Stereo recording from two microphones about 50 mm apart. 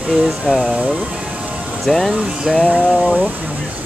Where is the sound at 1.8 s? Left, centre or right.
Centre.